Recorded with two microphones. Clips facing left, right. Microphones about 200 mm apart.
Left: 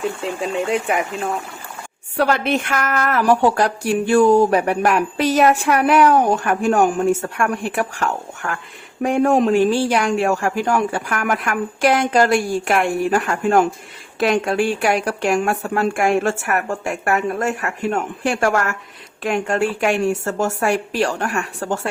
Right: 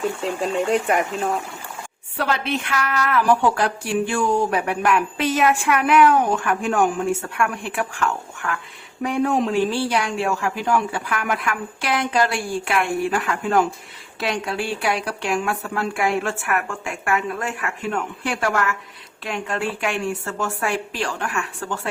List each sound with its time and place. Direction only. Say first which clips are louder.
0.2 s speech: even; centre (ahead or behind)
2.1 s speech: left 5 dB; 45° left (ahead or behind)